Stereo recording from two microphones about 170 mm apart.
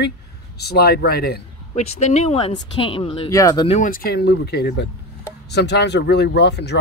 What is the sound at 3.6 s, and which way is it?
Speech, 45° left (ahead or behind).